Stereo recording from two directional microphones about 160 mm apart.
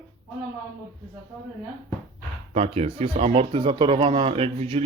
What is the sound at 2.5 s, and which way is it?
Speech, 40° right (ahead or behind).